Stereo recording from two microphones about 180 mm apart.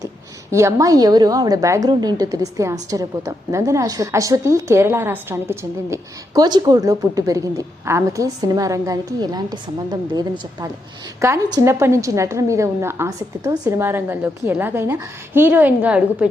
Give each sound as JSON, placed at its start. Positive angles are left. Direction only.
{"t": 0.5, "sound": "a woman's voice", "side_deg": -15}